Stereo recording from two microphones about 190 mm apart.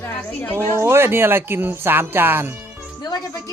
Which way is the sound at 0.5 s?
15° right (ahead or behind).